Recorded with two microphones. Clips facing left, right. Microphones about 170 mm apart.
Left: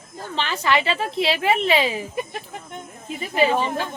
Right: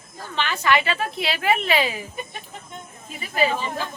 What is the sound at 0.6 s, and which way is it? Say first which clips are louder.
A woman's voice: even; 25° left (ahead or behind).